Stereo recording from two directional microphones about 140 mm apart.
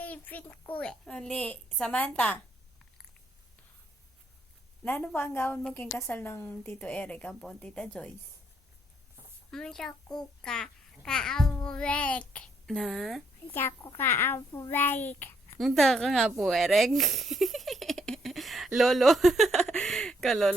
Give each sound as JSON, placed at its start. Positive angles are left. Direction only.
{"t": 0.0, "sound": "a woman's voice", "side_deg": 10}
{"t": 4.8, "sound": "a woman's voice", "side_deg": 15}
{"t": 9.5, "sound": "a child's voice", "side_deg": 5}
{"t": 13.5, "sound": "a woman's voice", "side_deg": 15}
{"t": 15.2, "sound": "a sound", "side_deg": 15}
{"t": 15.5, "sound": "a child's voice", "side_deg": 0}